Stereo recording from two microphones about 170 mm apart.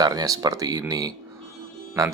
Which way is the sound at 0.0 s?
25° right (ahead or behind).